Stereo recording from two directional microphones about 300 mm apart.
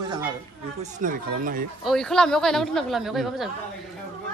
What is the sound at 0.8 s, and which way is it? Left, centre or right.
Speech, right.